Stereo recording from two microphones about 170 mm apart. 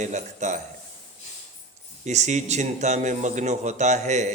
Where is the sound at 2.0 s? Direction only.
45° right (ahead or behind).